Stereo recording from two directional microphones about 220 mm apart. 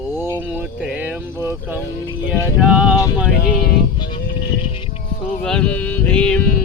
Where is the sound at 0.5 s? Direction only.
5° right (ahead or behind).